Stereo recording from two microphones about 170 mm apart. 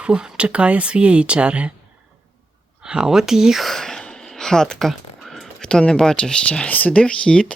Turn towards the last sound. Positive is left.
turn(degrees=5)  # may be behind; listen again after turning